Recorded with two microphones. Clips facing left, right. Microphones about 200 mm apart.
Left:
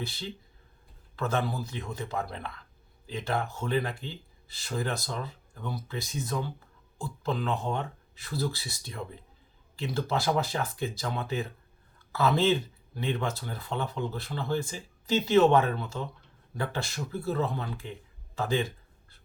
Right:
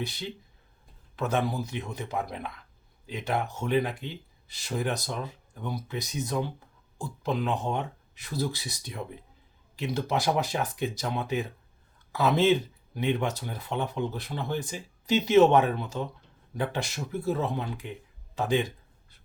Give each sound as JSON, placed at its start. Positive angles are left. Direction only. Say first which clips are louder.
{"t": 1.1, "sound": "speech", "louder": "right 2 dB", "side_deg": -15}